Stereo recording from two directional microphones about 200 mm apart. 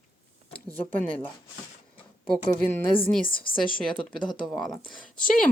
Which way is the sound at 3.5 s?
25° left (ahead or behind).